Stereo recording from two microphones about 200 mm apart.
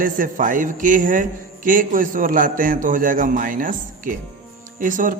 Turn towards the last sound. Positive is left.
turn(degrees=-40)  # may be behind; listen again after turning